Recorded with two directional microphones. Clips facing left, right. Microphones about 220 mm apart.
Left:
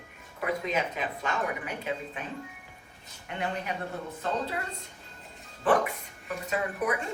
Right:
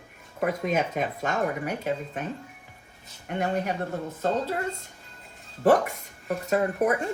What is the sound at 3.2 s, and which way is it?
A woman's voice, 45° right (ahead or behind).